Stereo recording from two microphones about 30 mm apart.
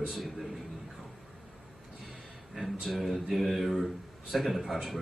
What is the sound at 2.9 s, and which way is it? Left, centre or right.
A man's voice, centre.